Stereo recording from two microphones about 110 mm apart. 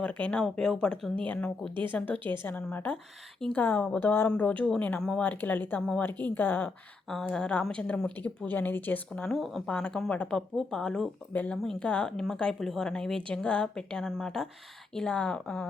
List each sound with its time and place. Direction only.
0.0 s speech: 10° left (ahead or behind)
2.1 s a woman's voice: 50° right (ahead or behind)
2.4 s speech: 15° left (ahead or behind)
7.1 s speech: 5° left (ahead or behind)